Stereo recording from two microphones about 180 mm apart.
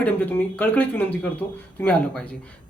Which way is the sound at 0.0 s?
10° left (ahead or behind).